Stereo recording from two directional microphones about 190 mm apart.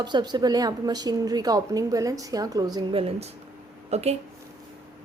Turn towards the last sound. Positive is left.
turn(degrees=-35)  # may be behind; listen again after turning